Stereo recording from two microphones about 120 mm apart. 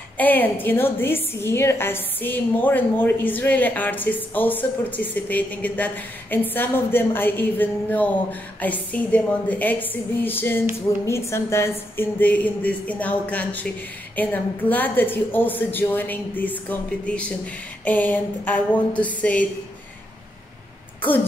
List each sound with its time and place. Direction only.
0.2 s a woman's voice: 15° left (ahead or behind)
21.0 s throat clearing: 15° left (ahead or behind)